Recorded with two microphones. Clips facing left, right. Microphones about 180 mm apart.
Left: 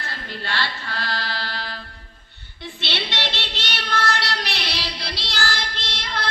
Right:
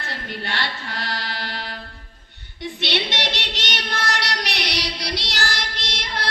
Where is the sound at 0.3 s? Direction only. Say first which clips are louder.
Left 1 dB; 15° right (ahead or behind).